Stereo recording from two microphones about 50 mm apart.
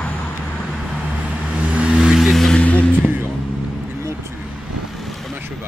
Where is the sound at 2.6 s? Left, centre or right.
Left.